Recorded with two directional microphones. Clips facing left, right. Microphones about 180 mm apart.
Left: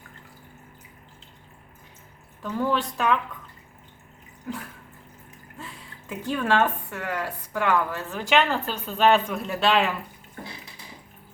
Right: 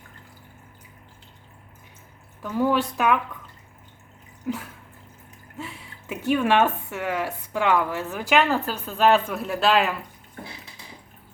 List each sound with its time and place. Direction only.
2.4 s speech: 10° right (ahead or behind)
4.5 s speech: 15° right (ahead or behind)
5.6 s a sound: 15° right (ahead or behind)
6.3 s a woman's voice: 15° right (ahead or behind)
8.1 s speech: 5° right (ahead or behind)